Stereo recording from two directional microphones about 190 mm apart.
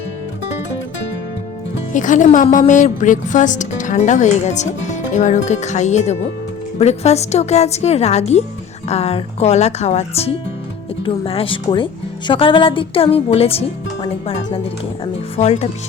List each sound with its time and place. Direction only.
1.9 s speech: 40° left (ahead or behind)